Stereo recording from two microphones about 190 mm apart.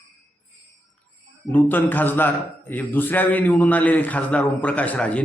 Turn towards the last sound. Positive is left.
turn(degrees=5)  # may be behind; listen again after turning